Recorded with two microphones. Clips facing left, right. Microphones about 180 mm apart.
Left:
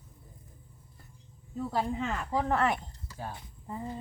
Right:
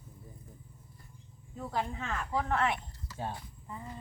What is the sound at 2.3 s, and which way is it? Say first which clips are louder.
Speech: left 3 dB; 40° left (ahead or behind).